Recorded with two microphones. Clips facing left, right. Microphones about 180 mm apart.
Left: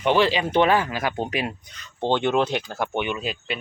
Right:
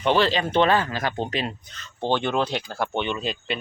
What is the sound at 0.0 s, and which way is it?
Speech, 15° left (ahead or behind).